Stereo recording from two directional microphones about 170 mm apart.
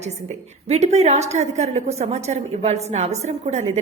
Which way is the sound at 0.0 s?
40° right (ahead or behind).